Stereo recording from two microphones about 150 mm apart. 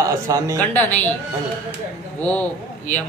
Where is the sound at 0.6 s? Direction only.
10° left (ahead or behind).